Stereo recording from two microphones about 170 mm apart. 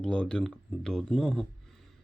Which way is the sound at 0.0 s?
5° left (ahead or behind).